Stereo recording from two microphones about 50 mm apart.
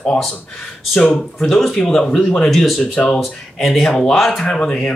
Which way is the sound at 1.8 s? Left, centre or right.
Centre.